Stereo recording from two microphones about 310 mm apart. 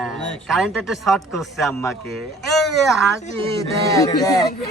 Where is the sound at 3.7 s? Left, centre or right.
Centre.